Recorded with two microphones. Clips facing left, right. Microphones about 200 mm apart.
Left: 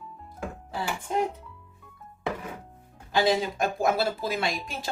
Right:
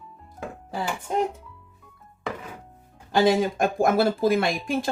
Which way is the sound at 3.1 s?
50° right (ahead or behind).